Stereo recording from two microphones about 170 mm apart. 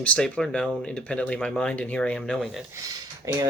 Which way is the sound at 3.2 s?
15° right (ahead or behind).